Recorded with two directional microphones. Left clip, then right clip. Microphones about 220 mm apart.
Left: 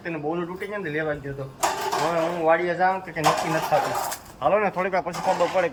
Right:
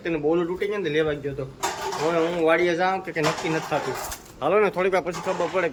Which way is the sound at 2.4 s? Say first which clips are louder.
Left 1 dB; 10° right (ahead or behind).